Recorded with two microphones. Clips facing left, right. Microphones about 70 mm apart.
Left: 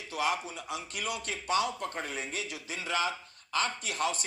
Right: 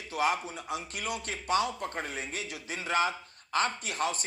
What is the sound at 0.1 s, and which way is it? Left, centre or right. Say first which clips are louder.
A man's voice: right 2 dB; right.